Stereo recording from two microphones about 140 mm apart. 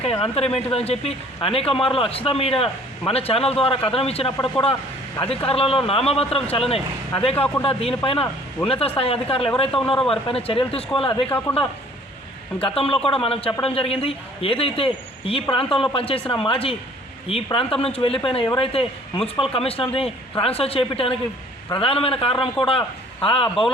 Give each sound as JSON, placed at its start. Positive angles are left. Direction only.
{"t": 0.2, "sound": "speech", "side_deg": 45}
{"t": 5.5, "sound": "a man's voice", "side_deg": 45}
{"t": 11.3, "sound": "speech", "side_deg": 15}
{"t": 12.5, "sound": "a man's voice", "side_deg": 40}